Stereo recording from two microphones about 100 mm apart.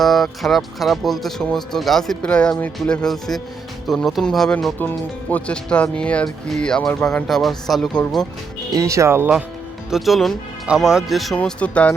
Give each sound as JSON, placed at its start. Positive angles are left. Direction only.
{"t": 0.0, "sound": "speech", "side_deg": 0}
{"t": 4.8, "sound": "speech", "side_deg": 15}
{"t": 8.7, "sound": "speech", "side_deg": -30}
{"t": 9.9, "sound": "speech", "side_deg": 0}
{"t": 11.3, "sound": "speech", "side_deg": 15}